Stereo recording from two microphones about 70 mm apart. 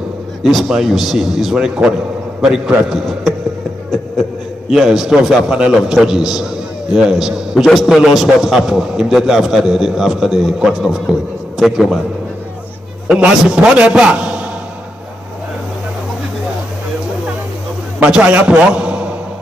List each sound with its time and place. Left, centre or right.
0.4 s a man's voice: centre
4.6 s a man's voice: centre
13.1 s a man's voice: centre
18.0 s a man's voice: centre